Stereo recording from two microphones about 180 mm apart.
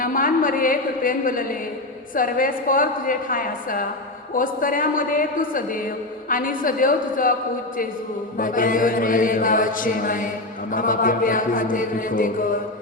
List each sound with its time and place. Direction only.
0.0 s a woman's voice: 50° left (ahead or behind)
8.4 s a woman's voice: 50° left (ahead or behind)